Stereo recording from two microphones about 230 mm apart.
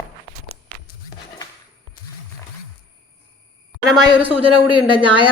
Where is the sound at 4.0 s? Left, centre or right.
Right.